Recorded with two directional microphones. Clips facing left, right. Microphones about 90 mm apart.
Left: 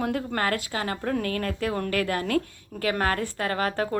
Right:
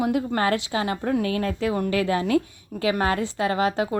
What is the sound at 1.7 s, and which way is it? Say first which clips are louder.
Speech: right 4 dB; 15° right (ahead or behind).